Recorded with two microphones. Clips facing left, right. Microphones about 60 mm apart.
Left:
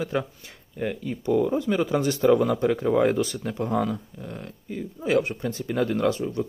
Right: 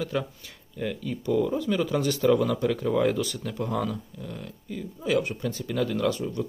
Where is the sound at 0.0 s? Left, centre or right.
Left.